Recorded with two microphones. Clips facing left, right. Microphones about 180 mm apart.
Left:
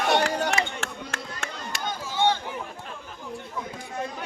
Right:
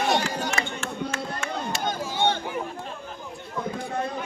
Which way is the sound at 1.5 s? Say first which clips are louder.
Right 7 dB; 60° right (ahead or behind).